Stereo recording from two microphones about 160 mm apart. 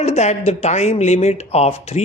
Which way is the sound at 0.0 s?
45° left (ahead or behind).